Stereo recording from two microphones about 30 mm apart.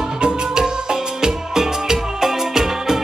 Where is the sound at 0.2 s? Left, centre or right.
Right.